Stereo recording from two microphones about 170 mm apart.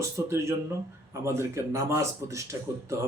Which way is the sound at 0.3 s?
15° right (ahead or behind).